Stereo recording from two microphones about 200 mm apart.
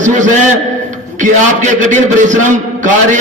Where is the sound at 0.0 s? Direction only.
40° right (ahead or behind).